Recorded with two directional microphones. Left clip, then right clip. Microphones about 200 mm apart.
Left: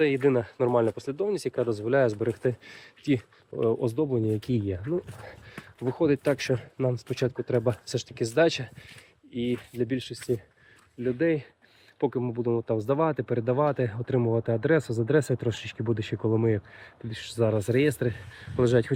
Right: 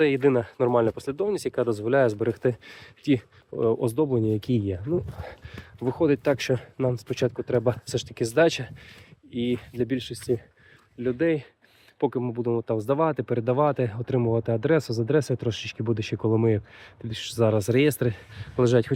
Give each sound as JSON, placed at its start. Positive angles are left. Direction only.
{"t": 0.0, "sound": "speech", "side_deg": -40}
{"t": 5.8, "sound": "speech", "side_deg": -25}